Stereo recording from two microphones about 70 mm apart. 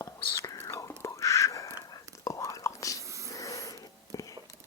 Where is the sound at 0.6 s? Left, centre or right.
Left.